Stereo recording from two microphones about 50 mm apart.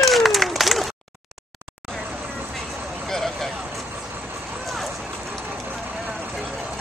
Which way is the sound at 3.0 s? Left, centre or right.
Centre.